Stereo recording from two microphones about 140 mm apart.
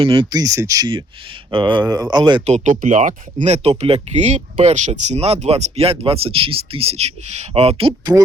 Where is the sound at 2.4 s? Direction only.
60° right (ahead or behind).